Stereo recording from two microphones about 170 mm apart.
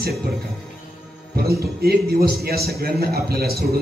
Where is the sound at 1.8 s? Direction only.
65° right (ahead or behind).